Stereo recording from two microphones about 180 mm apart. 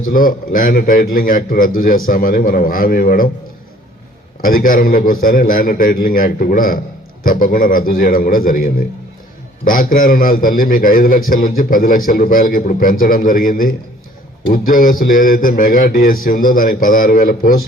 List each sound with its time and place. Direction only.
0.0 s a man's voice: 50° left (ahead or behind)
4.4 s a man's voice: 50° left (ahead or behind)